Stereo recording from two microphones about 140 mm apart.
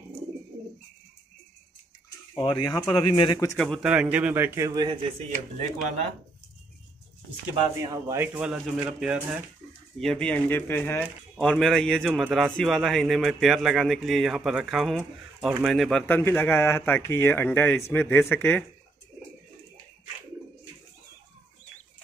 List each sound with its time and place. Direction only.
2.3 s speech: 30° left (ahead or behind)
3.0 s speech: 40° left (ahead or behind)
3.5 s a man's voice: 5° left (ahead or behind)
3.9 s a man's voice: 10° right (ahead or behind)
7.7 s speech: 25° right (ahead or behind)
8.2 s a man's voice: 5° right (ahead or behind)
9.9 s a man's voice: 5° left (ahead or behind)
16.1 s speech: 15° left (ahead or behind)